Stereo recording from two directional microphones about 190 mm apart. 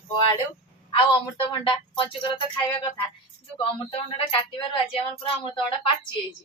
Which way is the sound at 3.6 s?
30° left (ahead or behind).